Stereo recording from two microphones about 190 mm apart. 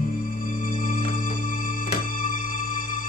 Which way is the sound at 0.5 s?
45° left (ahead or behind).